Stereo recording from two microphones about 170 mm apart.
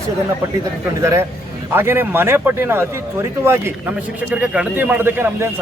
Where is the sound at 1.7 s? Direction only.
15° right (ahead or behind).